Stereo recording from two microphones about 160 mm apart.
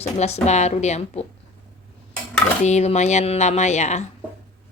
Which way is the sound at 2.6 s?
45° left (ahead or behind).